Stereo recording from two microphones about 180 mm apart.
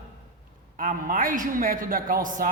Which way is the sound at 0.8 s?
45° right (ahead or behind).